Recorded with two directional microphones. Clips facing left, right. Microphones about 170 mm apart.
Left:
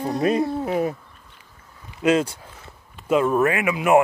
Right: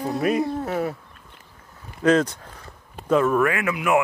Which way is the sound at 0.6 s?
15° left (ahead or behind).